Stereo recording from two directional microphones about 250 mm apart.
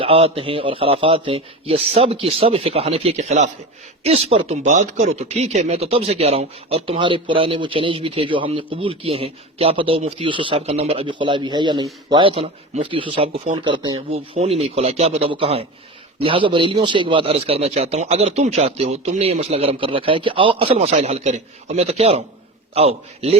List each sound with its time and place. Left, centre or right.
0.0 s speech: right